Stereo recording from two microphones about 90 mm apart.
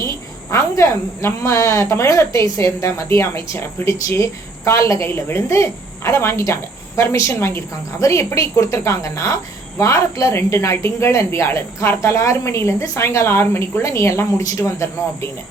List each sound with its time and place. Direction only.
0.5 s a woman's voice: 35° left (ahead or behind)